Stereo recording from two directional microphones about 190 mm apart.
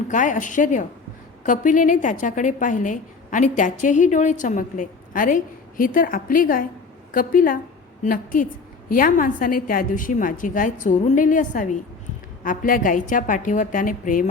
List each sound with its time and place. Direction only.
0.1 s a woman's voice: 45° left (ahead or behind)